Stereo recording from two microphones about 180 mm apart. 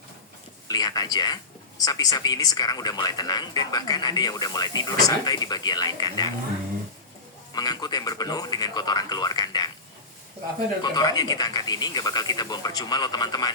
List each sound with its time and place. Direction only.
0.7 s speech: 20° left (ahead or behind)
7.5 s speech: 20° left (ahead or behind)
10.8 s speech: 20° left (ahead or behind)